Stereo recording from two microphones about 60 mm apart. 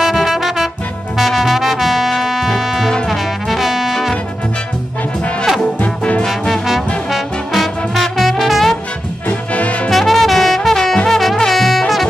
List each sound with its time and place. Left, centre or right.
0.0 s music: centre
6.2 s music: centre
9.5 s music: left
9.8 s brass instrument: centre